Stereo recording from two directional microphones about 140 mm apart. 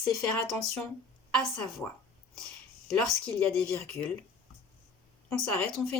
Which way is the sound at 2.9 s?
10° left (ahead or behind).